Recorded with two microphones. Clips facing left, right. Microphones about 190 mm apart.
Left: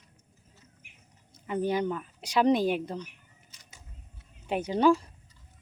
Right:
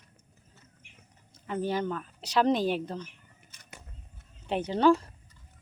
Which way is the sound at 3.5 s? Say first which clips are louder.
Right 7 dB; 55° right (ahead or behind).